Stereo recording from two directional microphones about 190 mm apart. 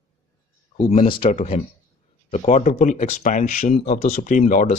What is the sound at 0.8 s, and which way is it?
Speech, 30° left (ahead or behind).